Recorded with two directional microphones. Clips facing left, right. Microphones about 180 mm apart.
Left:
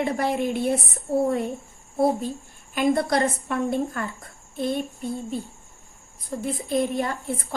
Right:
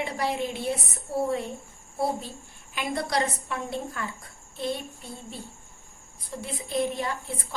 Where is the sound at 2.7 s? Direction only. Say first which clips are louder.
Left 7 dB; 50° left (ahead or behind).